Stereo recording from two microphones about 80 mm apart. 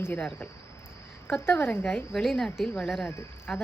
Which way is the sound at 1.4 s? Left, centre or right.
Left.